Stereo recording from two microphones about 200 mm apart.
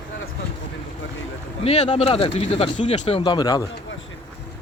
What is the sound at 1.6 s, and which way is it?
Speech, 30° left (ahead or behind).